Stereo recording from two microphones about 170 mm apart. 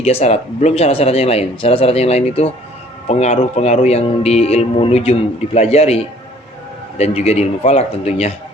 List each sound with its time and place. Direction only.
0.0 s speech: 35° left (ahead or behind)
7.0 s speech: 40° left (ahead or behind)